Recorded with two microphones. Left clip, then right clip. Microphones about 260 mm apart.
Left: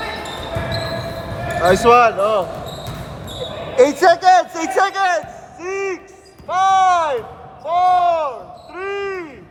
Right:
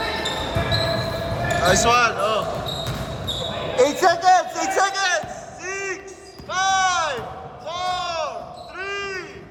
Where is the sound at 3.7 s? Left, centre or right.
Left.